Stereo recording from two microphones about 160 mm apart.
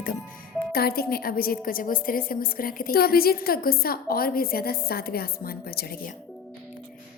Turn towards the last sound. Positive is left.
turn(degrees=70)  # may be behind; listen again after turning